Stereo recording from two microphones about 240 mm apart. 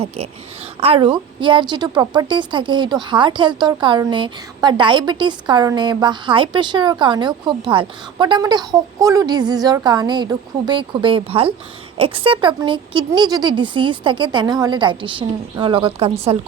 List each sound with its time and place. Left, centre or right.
0.0 s a woman's voice: right